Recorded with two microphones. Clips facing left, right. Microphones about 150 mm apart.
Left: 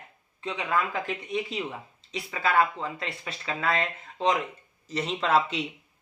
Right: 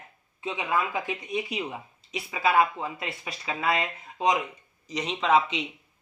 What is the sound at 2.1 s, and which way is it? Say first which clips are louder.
Speech: right 1 dB; 5° right (ahead or behind).